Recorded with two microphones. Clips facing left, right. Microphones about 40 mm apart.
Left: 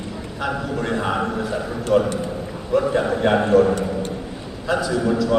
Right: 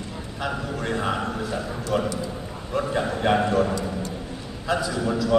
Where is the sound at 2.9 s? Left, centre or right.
Left.